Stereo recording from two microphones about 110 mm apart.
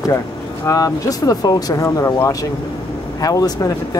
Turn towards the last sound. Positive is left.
turn(degrees=35)  # may be behind; listen again after turning